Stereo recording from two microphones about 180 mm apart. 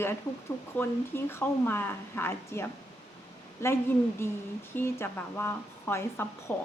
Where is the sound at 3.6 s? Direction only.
15° left (ahead or behind).